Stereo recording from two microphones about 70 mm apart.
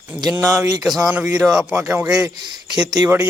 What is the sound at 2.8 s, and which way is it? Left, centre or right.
Speech, right.